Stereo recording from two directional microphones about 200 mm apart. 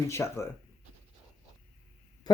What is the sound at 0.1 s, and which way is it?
Speech, 15° left (ahead or behind).